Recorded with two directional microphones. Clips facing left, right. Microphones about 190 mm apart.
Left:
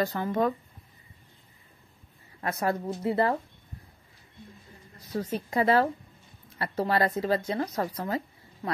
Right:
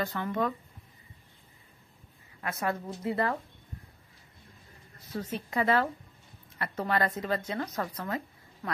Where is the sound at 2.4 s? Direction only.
35° left (ahead or behind).